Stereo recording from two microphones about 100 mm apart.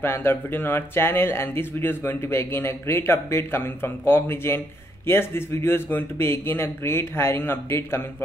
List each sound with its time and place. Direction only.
0.0 s speech: 20° left (ahead or behind)